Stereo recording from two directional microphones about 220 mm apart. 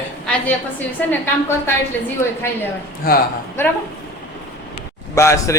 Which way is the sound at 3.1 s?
45° left (ahead or behind).